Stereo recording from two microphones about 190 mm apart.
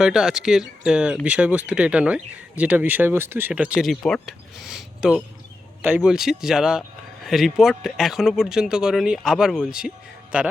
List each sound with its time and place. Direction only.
0.0 s speech: 5° right (ahead or behind)